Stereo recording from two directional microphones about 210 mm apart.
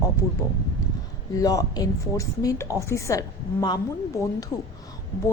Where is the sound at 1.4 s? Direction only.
15° left (ahead or behind).